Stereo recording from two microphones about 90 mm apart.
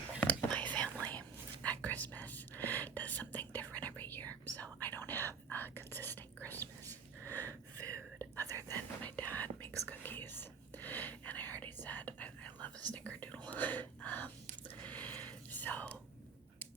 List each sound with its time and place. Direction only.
0.2 s whispering: 15° left (ahead or behind)
7.8 s whispering: 35° right (ahead or behind)
8.7 s whispering: 20° left (ahead or behind)